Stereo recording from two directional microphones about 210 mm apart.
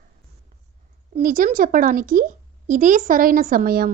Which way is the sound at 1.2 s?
40° right (ahead or behind).